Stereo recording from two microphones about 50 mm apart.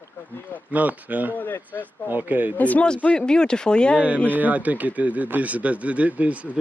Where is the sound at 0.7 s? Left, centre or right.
Right.